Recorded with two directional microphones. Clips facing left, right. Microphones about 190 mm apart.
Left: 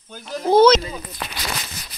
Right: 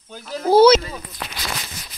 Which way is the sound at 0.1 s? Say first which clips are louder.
Right 1 dB; centre (ahead or behind).